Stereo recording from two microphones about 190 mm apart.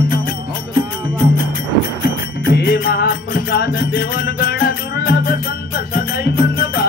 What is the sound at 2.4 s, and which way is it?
Music, 60° left (ahead or behind).